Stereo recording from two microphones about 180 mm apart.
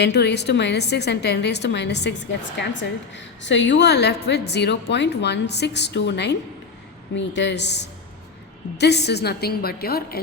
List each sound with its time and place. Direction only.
0.0 s a woman's voice: 70° left (ahead or behind)
3.2 s a woman's voice: 85° left; by 10.2 s 60° left (ahead or behind)